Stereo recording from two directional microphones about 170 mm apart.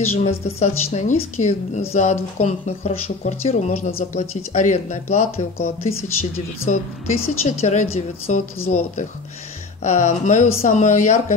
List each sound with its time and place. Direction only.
0.2 s speech: 40° left (ahead or behind)